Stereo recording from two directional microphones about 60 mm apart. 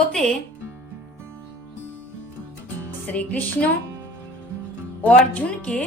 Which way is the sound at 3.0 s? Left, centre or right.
Left.